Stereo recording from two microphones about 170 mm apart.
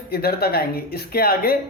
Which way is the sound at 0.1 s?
65° left (ahead or behind).